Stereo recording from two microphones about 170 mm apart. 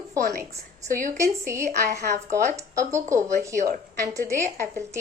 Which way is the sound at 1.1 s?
15° right (ahead or behind).